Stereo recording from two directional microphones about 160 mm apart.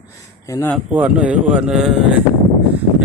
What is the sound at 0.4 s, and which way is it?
Speech, 20° left (ahead or behind).